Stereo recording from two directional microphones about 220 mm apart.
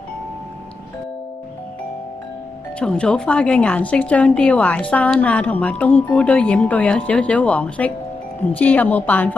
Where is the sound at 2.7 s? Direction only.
5° left (ahead or behind).